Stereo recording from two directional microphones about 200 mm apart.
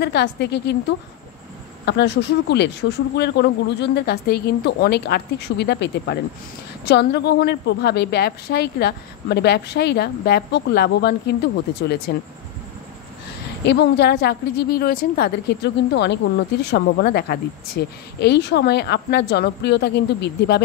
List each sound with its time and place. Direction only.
0.0 s a woman's voice: 55° left (ahead or behind)
13.7 s a woman's voice: 55° left (ahead or behind)